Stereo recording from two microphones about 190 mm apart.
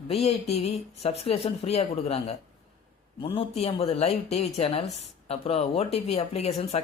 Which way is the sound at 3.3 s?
35° left (ahead or behind).